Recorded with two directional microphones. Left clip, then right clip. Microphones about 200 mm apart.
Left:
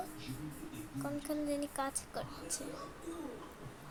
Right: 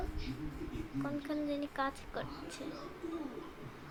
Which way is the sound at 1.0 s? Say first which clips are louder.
Even; 15° left (ahead or behind).